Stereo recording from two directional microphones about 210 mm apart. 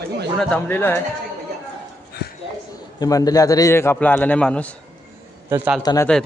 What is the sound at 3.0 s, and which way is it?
A man's voice, 15° left (ahead or behind).